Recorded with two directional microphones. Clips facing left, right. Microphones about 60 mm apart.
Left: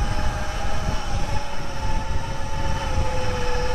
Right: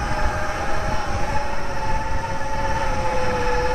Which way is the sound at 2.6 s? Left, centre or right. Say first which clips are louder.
Right 5 dB; right.